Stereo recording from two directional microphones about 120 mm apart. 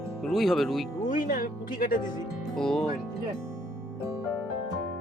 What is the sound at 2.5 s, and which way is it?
Speech, 5° left (ahead or behind).